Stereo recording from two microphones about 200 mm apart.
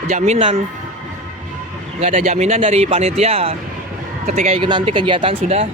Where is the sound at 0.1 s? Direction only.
35° right (ahead or behind).